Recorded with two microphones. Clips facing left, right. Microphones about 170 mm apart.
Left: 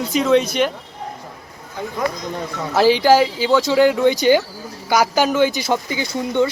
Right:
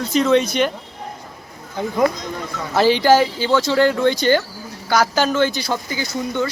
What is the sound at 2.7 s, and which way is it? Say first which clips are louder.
Speech: left 1 dB; 5° left (ahead or behind).